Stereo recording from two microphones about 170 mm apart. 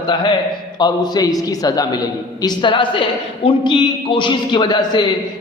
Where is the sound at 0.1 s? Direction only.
25° left (ahead or behind).